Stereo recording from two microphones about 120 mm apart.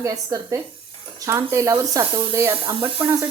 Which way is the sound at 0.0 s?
30° right (ahead or behind).